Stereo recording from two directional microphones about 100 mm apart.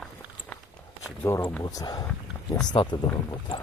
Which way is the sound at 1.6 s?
40° left (ahead or behind).